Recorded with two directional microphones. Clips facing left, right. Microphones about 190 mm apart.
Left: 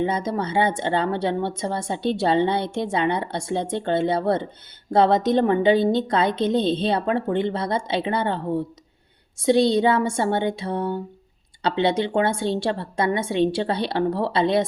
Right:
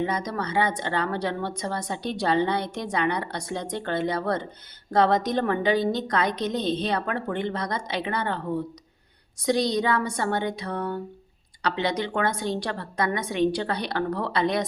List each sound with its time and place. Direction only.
0.0 s a woman's voice: 25° left (ahead or behind)